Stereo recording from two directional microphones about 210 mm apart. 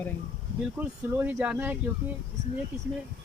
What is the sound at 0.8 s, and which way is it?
Speech, 10° right (ahead or behind).